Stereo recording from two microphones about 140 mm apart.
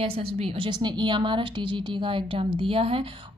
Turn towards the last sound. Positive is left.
turn(degrees=-40)  # may be behind; listen again after turning